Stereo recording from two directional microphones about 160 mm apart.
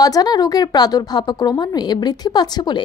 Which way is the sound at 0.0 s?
25° left (ahead or behind).